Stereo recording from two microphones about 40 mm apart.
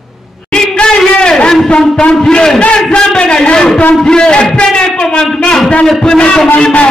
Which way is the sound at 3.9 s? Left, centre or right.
Centre.